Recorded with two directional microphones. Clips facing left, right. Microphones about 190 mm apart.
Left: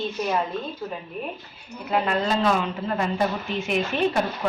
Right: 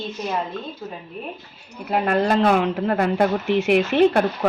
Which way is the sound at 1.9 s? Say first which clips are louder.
Right 4 dB; 55° right (ahead or behind).